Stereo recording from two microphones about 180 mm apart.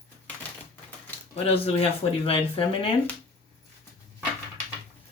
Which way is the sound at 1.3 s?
35° left (ahead or behind).